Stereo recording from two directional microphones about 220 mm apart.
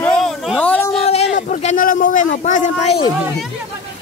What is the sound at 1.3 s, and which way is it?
A man's voice, 35° left (ahead or behind).